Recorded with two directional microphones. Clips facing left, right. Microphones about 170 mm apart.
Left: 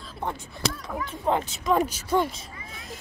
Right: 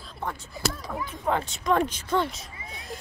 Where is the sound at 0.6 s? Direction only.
5° right (ahead or behind).